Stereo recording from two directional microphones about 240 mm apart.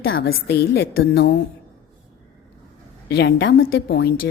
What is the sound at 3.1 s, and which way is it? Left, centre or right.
A woman's voice, left.